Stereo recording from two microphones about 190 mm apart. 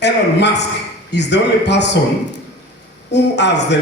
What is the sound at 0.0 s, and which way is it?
A man's voice, 65° left (ahead or behind).